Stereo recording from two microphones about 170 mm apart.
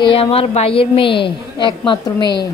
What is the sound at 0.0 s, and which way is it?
A woman's voice, 35° left (ahead or behind).